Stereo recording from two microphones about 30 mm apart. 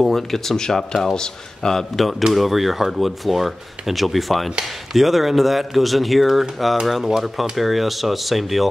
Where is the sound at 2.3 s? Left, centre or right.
Centre.